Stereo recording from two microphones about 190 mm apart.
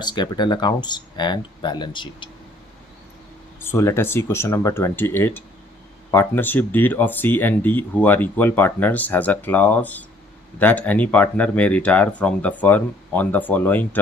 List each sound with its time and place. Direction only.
0.0 s speech: 25° left (ahead or behind)
3.6 s speech: 15° left (ahead or behind)